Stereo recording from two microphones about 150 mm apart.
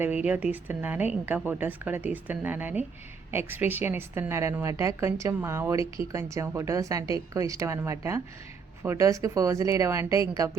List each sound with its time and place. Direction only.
0.0 s a woman's voice: 10° right (ahead or behind)